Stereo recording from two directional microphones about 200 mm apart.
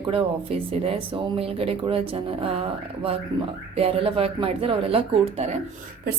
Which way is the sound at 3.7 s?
30° right (ahead or behind).